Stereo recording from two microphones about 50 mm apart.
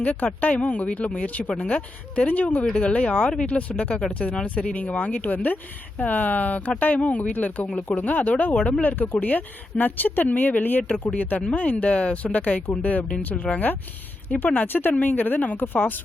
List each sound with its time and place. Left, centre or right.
0.0 s a woman's voice: left
8.5 s speech: centre
8.8 s a woman's voice: left